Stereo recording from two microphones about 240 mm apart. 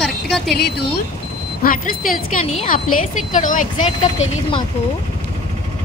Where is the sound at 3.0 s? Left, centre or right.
Left.